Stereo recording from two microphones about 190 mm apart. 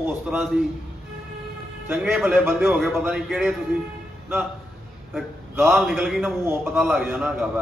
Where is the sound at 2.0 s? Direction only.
5° right (ahead or behind).